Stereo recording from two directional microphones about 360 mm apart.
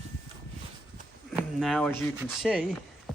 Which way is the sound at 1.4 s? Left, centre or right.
Centre.